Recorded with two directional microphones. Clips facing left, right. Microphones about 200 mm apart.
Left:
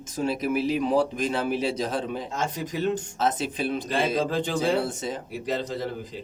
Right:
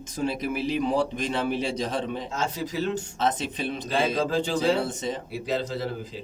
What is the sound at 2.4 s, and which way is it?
Speech, 15° left (ahead or behind).